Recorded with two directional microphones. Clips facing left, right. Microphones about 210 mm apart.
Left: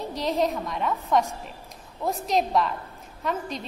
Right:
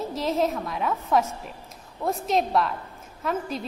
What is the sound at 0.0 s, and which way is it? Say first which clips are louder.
A woman's voice: right 1 dB; centre (ahead or behind).